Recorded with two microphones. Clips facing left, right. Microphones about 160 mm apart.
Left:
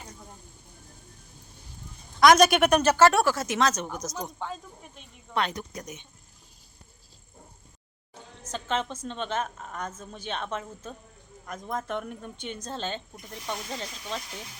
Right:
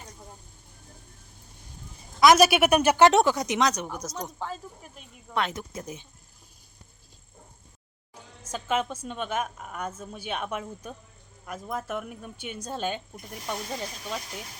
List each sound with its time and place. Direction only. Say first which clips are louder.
2.2 s a woman's voice: even; 5° right (ahead or behind)
5.7 s speech: right 2 dB; 30° right (ahead or behind)
8.4 s a woman's voice: right 2 dB; 10° right (ahead or behind)